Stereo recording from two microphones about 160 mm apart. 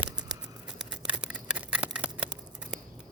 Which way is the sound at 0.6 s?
5° right (ahead or behind).